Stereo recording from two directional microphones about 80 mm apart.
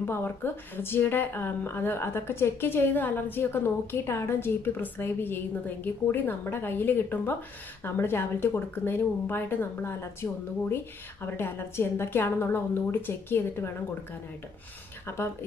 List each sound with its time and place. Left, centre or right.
0.0 s a woman's voice: left
15.1 s a woman's voice: left